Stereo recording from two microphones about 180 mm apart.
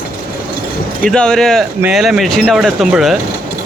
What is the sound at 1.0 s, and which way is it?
Speech, 5° left (ahead or behind).